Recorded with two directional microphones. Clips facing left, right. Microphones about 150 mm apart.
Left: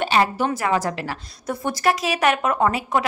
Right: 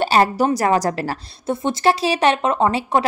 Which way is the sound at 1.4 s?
25° right (ahead or behind).